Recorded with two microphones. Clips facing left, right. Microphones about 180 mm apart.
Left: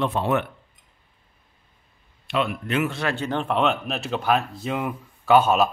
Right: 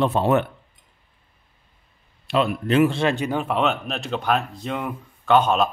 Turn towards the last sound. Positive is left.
turn(degrees=5)  # may be behind; listen again after turning